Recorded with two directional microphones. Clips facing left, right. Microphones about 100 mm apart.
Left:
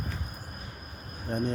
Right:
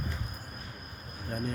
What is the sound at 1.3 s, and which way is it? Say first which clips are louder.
Speech: left 5 dB; 25° left (ahead or behind).